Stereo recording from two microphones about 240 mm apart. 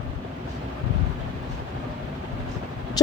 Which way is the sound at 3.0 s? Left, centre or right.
Centre.